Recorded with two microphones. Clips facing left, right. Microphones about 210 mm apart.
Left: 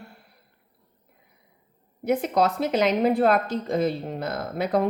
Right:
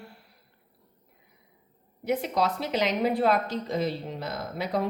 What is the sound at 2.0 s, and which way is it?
A woman's voice, 50° left (ahead or behind).